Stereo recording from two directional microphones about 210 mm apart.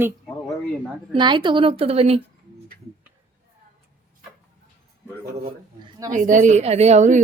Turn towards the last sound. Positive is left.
turn(degrees=-35)  # may be behind; listen again after turning